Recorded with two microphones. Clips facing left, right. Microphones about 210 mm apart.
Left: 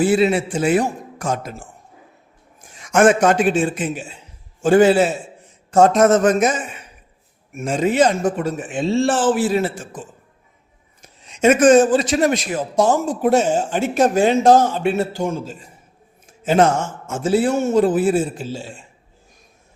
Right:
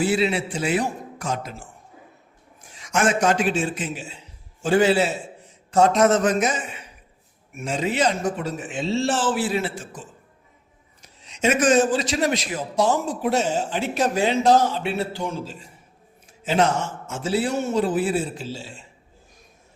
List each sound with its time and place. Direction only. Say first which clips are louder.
0.0 s a man's voice: left 6 dB; 50° left (ahead or behind)